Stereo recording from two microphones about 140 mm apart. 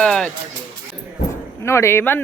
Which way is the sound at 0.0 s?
5° left (ahead or behind).